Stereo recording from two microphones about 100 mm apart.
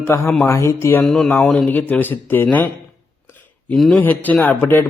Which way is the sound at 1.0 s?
5° left (ahead or behind).